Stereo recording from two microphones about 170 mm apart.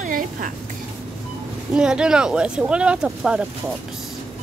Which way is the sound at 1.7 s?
5° right (ahead or behind).